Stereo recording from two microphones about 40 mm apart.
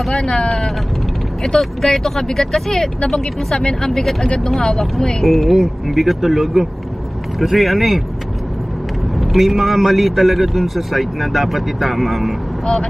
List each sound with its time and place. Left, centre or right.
0.1 s speech: left
1.6 s a man's voice: centre
9.1 s a man's voice: centre